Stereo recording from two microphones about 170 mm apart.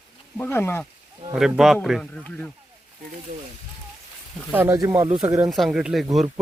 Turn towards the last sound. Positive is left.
turn(degrees=0)  # may be behind; listen again after turning